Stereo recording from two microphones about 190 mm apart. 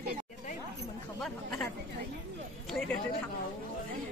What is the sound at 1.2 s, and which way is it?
Speech, 5° left (ahead or behind).